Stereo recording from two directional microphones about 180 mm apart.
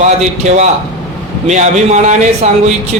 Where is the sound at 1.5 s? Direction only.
40° right (ahead or behind).